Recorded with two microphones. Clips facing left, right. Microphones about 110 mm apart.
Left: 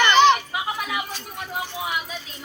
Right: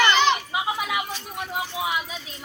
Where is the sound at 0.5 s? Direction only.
15° right (ahead or behind).